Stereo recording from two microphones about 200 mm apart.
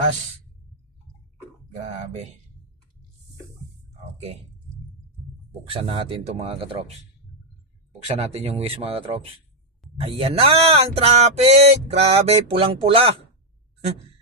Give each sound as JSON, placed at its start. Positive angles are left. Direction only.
{"t": 5.7, "sound": "speech", "side_deg": -25}
{"t": 8.2, "sound": "speech", "side_deg": -30}